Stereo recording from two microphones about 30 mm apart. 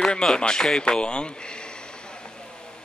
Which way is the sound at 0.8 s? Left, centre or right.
Left.